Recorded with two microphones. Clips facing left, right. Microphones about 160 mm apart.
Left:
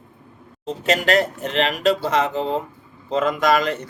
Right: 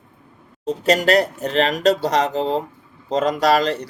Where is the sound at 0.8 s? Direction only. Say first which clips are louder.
Right 2 dB; 40° right (ahead or behind).